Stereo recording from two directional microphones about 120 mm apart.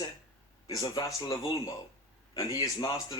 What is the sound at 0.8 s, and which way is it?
Speech, 40° left (ahead or behind).